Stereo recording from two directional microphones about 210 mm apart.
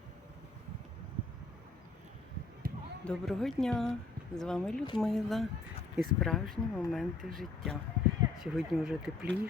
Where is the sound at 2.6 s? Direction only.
45° right (ahead or behind).